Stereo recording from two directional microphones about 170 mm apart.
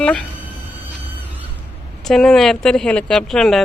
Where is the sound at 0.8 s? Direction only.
10° right (ahead or behind).